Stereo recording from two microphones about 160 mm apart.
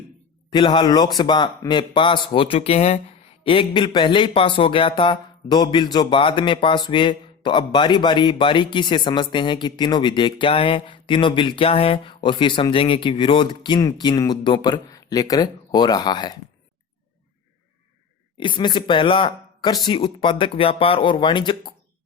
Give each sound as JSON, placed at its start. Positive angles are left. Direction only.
{"t": 0.5, "sound": "speech", "side_deg": 30}
{"t": 18.3, "sound": "speech", "side_deg": 30}